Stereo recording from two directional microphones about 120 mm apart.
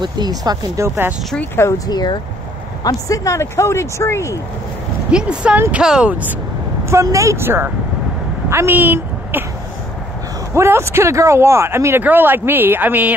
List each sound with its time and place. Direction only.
0.0 s speech: 35° right (ahead or behind)
1.9 s speech: 35° left (ahead or behind)
5.1 s speech: 10° right (ahead or behind)
6.9 s speech: 25° right (ahead or behind)
8.5 s a sound: 20° right (ahead or behind)
10.5 s speech: 20° right (ahead or behind)